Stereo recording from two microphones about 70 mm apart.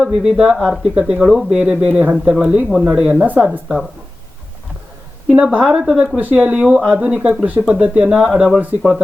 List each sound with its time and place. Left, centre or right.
0.0 s speech: centre
2.4 s speech: centre
5.3 s speech: centre
5.7 s speech: centre
6.1 s speech: centre
7.2 s speech: centre
7.7 s speech: centre
8.3 s speech: centre